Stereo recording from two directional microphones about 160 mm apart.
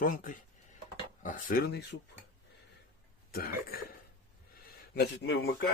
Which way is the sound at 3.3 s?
65° left (ahead or behind).